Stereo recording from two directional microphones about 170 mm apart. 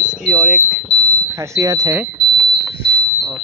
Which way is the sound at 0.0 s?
5° right (ahead or behind).